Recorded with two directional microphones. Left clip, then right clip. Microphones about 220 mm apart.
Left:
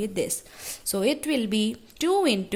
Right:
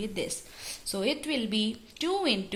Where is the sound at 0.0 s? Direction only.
45° left (ahead or behind).